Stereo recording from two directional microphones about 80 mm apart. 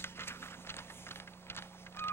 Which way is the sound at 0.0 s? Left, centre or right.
Left.